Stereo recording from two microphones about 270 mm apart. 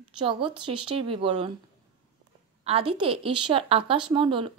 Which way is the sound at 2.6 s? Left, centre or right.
Right.